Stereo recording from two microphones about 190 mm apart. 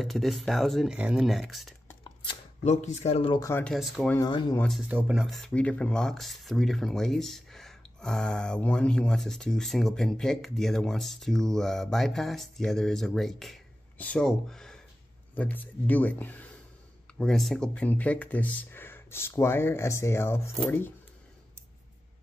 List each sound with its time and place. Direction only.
0.0 s speech: centre (ahead or behind)
2.6 s speech: 35° left (ahead or behind)
3.3 s speech: 15° left (ahead or behind)
3.6 s speech: centre (ahead or behind)
4.3 s speech: 25° left (ahead or behind)
4.6 s speech: centre (ahead or behind)